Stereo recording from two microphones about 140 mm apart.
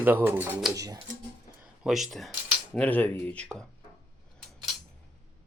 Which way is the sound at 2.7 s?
10° left (ahead or behind).